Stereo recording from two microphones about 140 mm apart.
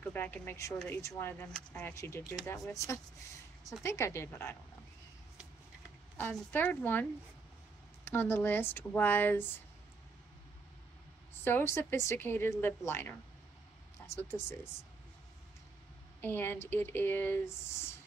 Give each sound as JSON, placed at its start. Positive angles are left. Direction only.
{"t": 0.0, "sound": "a woman's voice", "side_deg": 15}
{"t": 6.1, "sound": "speech", "side_deg": 15}
{"t": 11.4, "sound": "speech", "side_deg": 15}
{"t": 14.1, "sound": "speech", "side_deg": 15}
{"t": 16.2, "sound": "speech", "side_deg": 15}